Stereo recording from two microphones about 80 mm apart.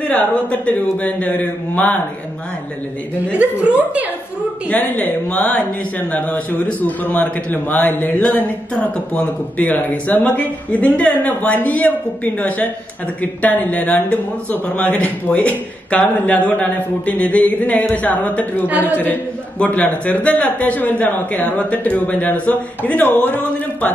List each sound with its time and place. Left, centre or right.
0.0 s speech: left
3.3 s a woman's voice: centre
4.6 s speech: left
18.7 s a woman's voice: right
19.6 s speech: centre